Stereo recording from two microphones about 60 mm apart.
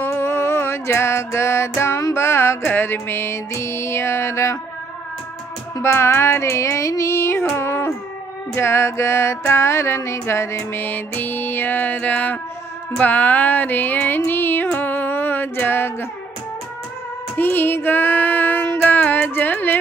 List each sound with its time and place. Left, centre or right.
0.0 s music: left
2.6 s music: left
5.8 s music: left
7.5 s a sound: left
8.5 s music: left
10.8 s music: left
12.1 s a sound: left
13.0 s music: left
17.4 s female singing: left
18.8 s music: left